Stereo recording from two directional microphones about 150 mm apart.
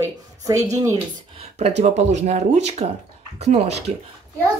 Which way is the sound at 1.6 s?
45° right (ahead or behind).